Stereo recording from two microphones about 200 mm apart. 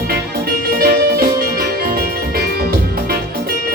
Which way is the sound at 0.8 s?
50° right (ahead or behind).